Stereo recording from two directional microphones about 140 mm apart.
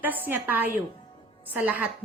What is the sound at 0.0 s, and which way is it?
A woman's voice, 15° right (ahead or behind).